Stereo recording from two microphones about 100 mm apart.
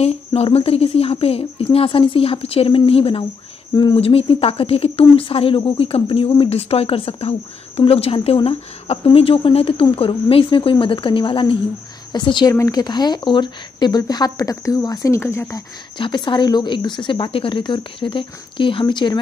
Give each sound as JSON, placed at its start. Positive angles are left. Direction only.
{"t": 0.0, "sound": "speech", "side_deg": 80}
{"t": 8.5, "sound": "speech", "side_deg": 70}
{"t": 12.4, "sound": "speech", "side_deg": 35}
{"t": 15.1, "sound": "speech", "side_deg": 25}
{"t": 16.0, "sound": "speech", "side_deg": 55}